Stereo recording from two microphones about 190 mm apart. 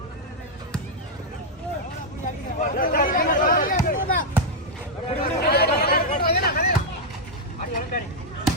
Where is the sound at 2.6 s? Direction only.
45° left (ahead or behind).